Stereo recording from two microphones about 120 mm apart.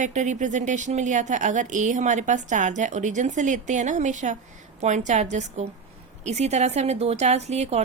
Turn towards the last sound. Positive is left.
turn(degrees=-65)  # may be behind; listen again after turning